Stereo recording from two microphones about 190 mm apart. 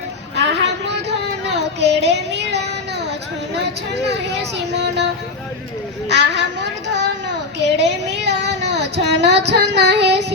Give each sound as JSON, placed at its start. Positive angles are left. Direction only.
{"t": 0.3, "sound": "a sound", "side_deg": -65}
{"t": 1.5, "sound": "music", "side_deg": -65}
{"t": 4.0, "sound": "speech", "side_deg": -65}
{"t": 6.1, "sound": "child singing", "side_deg": -65}